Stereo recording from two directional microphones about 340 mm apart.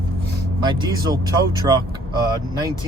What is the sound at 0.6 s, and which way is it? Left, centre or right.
Speech, centre.